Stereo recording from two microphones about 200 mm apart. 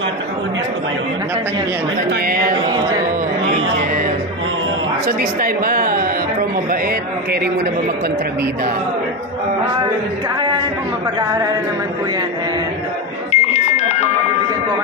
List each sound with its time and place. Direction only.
2.0 s speech: 45° right (ahead or behind)
5.0 s speech: 45° right (ahead or behind)
13.3 s music: 35° left (ahead or behind)